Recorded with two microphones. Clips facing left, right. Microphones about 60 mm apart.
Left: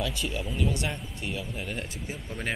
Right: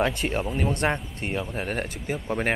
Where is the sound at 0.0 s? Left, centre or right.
Right.